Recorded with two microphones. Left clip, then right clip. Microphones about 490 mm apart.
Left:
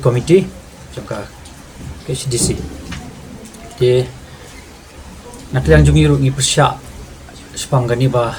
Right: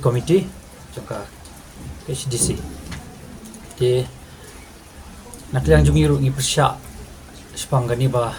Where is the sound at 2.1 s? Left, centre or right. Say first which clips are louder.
Left 6 dB; right.